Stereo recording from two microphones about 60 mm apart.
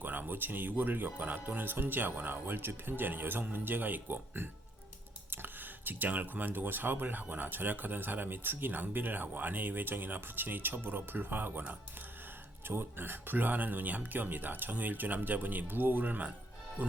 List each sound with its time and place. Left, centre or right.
0.0 s speech: right
12.6 s speech: right